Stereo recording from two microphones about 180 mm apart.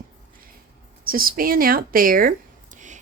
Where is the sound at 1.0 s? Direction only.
55° right (ahead or behind).